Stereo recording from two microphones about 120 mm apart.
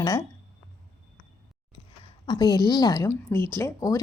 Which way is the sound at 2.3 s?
35° left (ahead or behind).